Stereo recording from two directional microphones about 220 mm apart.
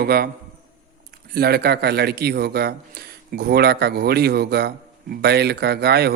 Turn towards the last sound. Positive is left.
turn(degrees=-45)  # may be behind; listen again after turning